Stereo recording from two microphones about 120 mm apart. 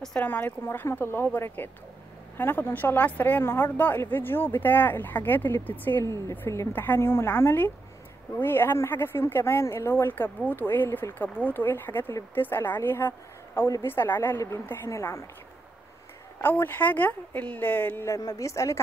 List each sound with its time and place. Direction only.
0.0 s a woman's voice: 10° left (ahead or behind)
16.3 s a woman's voice: 15° left (ahead or behind)